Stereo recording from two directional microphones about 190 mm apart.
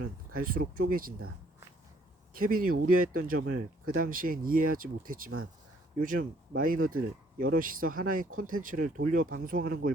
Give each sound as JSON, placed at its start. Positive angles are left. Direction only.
{"t": 0.0, "sound": "speech", "side_deg": -50}
{"t": 2.3, "sound": "speech", "side_deg": -50}